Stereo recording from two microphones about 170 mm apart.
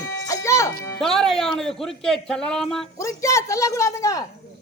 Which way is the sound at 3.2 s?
15° left (ahead or behind).